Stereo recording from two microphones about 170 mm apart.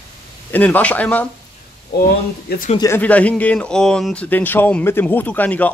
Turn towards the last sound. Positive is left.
turn(degrees=10)  # may be behind; listen again after turning